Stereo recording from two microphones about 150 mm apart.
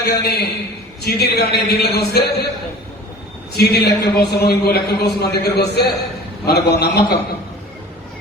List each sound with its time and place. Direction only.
0.0 s a man's voice: 90° left
3.5 s a man's voice: 90° left